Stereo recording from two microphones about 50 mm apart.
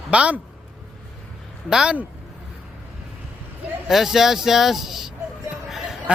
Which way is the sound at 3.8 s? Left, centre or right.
Centre.